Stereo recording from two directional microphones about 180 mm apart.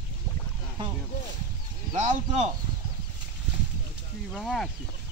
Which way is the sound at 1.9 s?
40° right (ahead or behind).